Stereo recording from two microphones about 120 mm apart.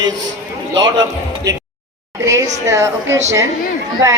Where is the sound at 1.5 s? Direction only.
30° right (ahead or behind).